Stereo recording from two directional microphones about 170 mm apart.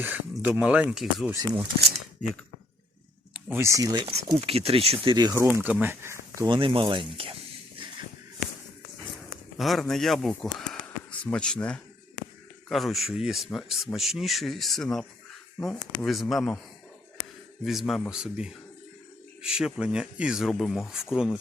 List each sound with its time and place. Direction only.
0.0 s speech: 10° right (ahead or behind)
3.3 s speech: 15° right (ahead or behind)
4.4 s speech: 35° right (ahead or behind)
5.5 s speech: 5° right (ahead or behind)
6.6 s speech: 30° right (ahead or behind)
9.6 s speech: centre (ahead or behind)
17.6 s speech: centre (ahead or behind)